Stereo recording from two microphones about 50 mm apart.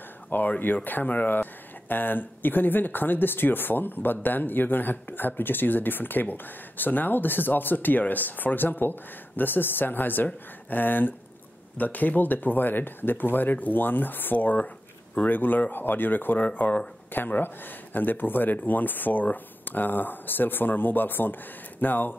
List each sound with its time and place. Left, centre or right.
0.3 s speech: left